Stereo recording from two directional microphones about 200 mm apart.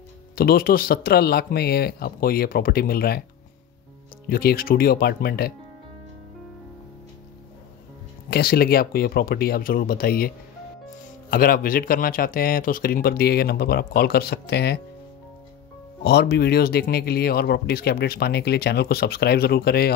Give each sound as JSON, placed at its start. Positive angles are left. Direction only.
{"t": 0.4, "sound": "speech", "side_deg": 50}
{"t": 4.3, "sound": "speech", "side_deg": 50}
{"t": 8.3, "sound": "speech", "side_deg": 50}
{"t": 16.0, "sound": "speech", "side_deg": 55}